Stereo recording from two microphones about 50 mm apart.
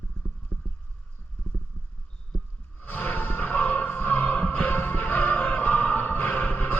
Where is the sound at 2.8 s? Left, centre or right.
Left.